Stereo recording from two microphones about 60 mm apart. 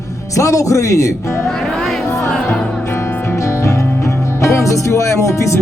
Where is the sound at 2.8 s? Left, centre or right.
Left.